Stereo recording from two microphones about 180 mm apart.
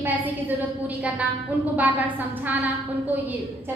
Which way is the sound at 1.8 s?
10° right (ahead or behind).